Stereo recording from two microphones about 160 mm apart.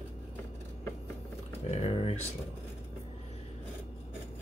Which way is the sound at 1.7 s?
40° left (ahead or behind).